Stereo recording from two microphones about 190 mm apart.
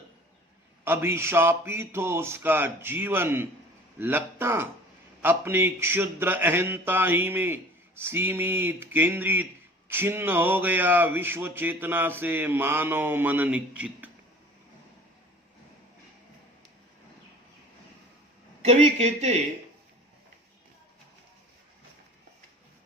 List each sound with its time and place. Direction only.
0.9 s speech: 15° right (ahead or behind)
18.6 s speech: 35° right (ahead or behind)